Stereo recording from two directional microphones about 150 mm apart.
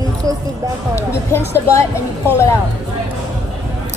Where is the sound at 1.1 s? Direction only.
20° left (ahead or behind).